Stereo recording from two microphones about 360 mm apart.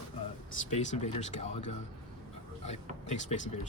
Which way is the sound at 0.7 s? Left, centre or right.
Centre.